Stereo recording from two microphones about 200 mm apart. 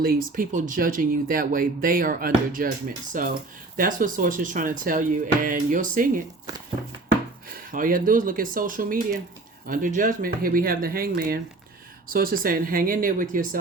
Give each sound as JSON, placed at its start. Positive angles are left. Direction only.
{"t": 0.0, "sound": "speech", "side_deg": -45}
{"t": 7.5, "sound": "speech", "side_deg": -45}